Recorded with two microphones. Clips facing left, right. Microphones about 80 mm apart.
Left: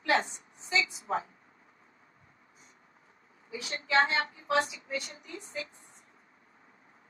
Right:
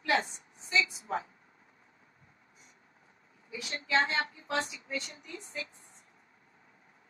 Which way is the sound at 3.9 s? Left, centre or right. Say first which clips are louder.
Left 3 dB; left.